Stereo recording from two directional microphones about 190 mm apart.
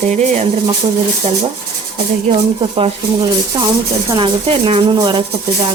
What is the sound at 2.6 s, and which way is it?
Speech, 25° right (ahead or behind).